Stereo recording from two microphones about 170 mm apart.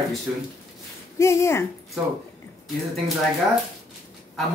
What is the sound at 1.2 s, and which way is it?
Speech, 15° left (ahead or behind).